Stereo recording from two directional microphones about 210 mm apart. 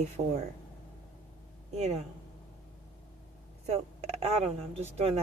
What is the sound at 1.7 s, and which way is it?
Speech, 30° right (ahead or behind).